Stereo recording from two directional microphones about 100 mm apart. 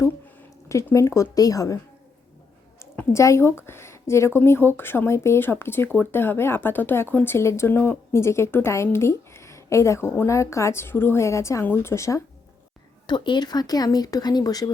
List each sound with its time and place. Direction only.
0.9 s speech: 30° left (ahead or behind)
2.7 s a woman's voice: 25° left (ahead or behind)
13.1 s speech: 50° left (ahead or behind)